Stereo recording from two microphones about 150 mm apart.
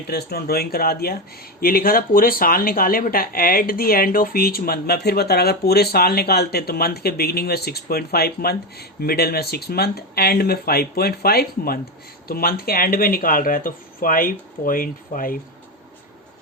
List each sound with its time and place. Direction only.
0.1 s speech: 90° left
1.6 s speech: 75° left (ahead or behind)